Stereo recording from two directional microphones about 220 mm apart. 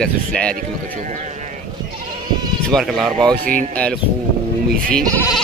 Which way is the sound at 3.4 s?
40° right (ahead or behind).